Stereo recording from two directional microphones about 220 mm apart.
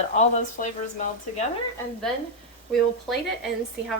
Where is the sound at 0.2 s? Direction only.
35° left (ahead or behind).